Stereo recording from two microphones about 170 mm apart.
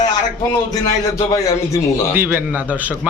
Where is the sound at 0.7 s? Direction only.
20° left (ahead or behind).